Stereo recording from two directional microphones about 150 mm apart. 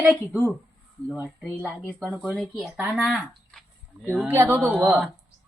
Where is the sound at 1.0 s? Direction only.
10° right (ahead or behind).